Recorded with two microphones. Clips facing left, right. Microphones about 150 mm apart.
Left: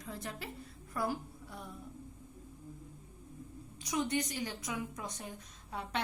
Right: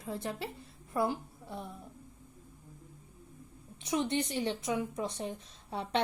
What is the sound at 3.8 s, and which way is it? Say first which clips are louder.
A woman's voice: right 3 dB; 25° right (ahead or behind).